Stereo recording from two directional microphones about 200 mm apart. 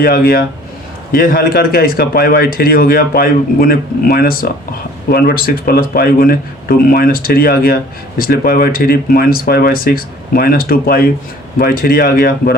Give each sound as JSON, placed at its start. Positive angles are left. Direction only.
{"t": 0.0, "sound": "speech", "side_deg": 45}